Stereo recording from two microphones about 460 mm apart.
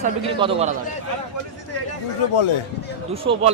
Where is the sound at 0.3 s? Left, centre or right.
Centre.